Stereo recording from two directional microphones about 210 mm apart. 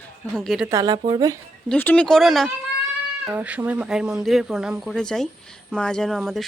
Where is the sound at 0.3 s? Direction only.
Centre (ahead or behind).